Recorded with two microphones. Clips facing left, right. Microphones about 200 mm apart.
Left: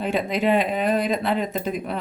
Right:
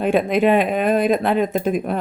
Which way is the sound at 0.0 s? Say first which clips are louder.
Right 6 dB; 55° right (ahead or behind).